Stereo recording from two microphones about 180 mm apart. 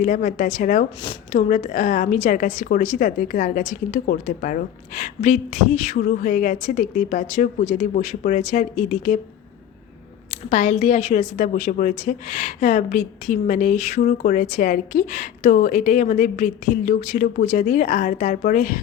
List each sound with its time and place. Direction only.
0.0 s a woman's voice: 50° left (ahead or behind)
10.5 s a woman's voice: 45° left (ahead or behind)